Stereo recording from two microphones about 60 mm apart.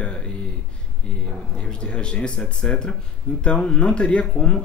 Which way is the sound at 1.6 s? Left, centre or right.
Centre.